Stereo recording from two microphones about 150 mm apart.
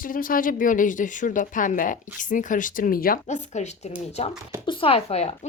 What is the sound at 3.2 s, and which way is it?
Speech, 50° left (ahead or behind).